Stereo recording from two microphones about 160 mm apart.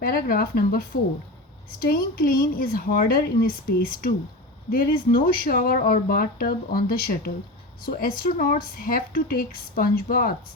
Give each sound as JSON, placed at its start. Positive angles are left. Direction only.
{"t": 0.0, "sound": "a woman's voice", "side_deg": 70}